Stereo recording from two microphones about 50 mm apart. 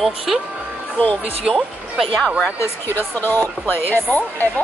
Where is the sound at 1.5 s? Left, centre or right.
Centre.